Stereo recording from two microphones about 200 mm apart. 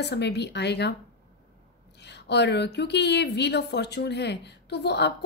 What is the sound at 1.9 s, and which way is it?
Speech, 55° left (ahead or behind).